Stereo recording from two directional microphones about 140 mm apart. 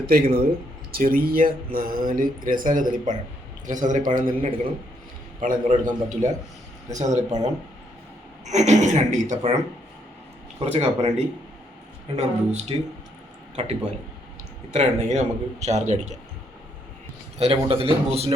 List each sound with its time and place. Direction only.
0.0 s a man's voice: 90° right; by 9.5 s 60° right (ahead or behind)
10.6 s a man's voice: 50° right (ahead or behind)
12.1 s a man's voice: 50° right (ahead or behind)
14.7 s a man's voice: 50° right (ahead or behind)
17.3 s a man's voice: 45° right (ahead or behind)